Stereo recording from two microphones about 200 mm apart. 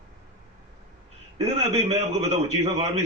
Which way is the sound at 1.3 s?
30° right (ahead or behind).